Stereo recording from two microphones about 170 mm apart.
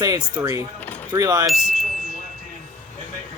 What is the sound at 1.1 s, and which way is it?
Speech, 20° right (ahead or behind).